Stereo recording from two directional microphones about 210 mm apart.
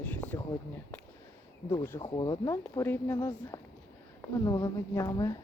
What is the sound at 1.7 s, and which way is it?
Speech, 10° left (ahead or behind).